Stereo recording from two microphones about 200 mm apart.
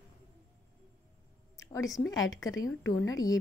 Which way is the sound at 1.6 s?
15° left (ahead or behind).